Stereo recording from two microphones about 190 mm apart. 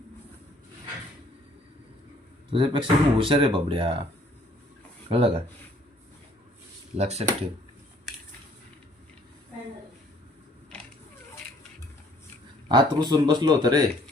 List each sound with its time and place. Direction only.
2.5 s speech: 25° right (ahead or behind)
5.0 s speech: 30° right (ahead or behind)
6.9 s speech: 35° right (ahead or behind)
12.6 s speech: 25° right (ahead or behind)